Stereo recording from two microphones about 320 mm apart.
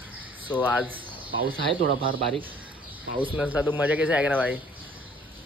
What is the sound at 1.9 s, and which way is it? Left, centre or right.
Speech, centre.